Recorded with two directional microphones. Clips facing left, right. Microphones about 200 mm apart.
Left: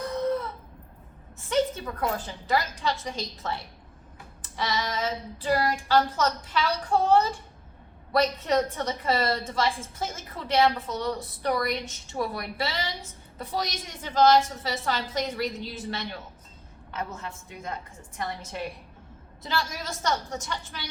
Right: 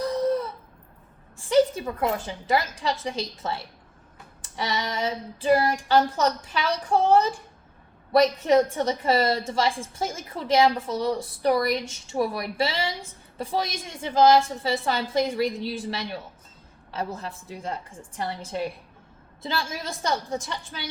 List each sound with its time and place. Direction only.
0.0 s a sound: 35° right (ahead or behind)
2.0 s a woman's voice: 25° right (ahead or behind)
8.7 s a woman's voice: 30° right (ahead or behind)